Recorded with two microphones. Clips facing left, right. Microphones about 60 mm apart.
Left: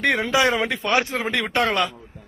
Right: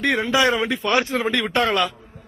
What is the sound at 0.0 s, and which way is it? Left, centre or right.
Speech, left.